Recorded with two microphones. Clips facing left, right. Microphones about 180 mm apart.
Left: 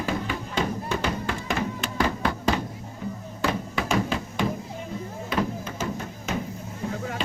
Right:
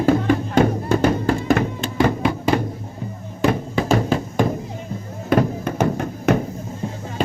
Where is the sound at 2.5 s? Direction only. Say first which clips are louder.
Right 9 dB; 60° right (ahead or behind).